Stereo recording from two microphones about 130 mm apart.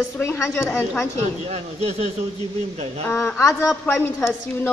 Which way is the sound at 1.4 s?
55° right (ahead or behind).